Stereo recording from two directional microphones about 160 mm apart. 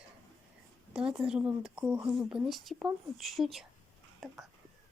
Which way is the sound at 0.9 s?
5° right (ahead or behind).